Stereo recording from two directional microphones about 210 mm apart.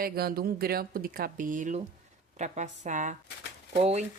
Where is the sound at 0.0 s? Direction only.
45° right (ahead or behind).